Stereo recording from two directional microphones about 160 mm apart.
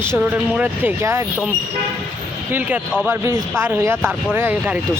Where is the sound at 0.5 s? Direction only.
10° right (ahead or behind).